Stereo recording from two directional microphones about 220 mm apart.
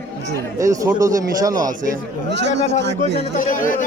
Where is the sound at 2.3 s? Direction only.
50° right (ahead or behind).